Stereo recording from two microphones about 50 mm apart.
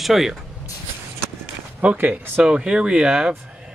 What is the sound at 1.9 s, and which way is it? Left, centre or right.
Speech, right.